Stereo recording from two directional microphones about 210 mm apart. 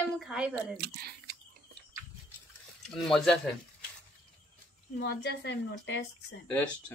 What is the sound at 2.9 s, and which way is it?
Speech, centre (ahead or behind).